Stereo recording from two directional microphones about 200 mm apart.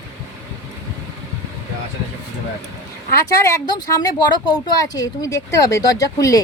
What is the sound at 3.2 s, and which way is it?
Speech, 15° left (ahead or behind).